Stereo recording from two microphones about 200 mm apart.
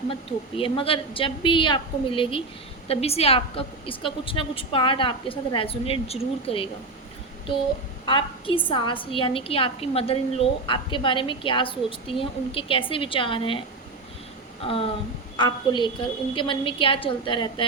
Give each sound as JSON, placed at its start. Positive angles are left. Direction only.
{"t": 0.1, "sound": "a woman's voice", "side_deg": 25}
{"t": 8.0, "sound": "a woman's voice", "side_deg": 25}
{"t": 14.6, "sound": "a sound", "side_deg": 30}
{"t": 15.4, "sound": "a woman's voice", "side_deg": 20}